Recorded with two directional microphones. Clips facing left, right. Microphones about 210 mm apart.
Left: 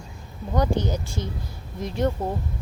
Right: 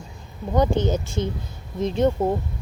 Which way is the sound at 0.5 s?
20° right (ahead or behind).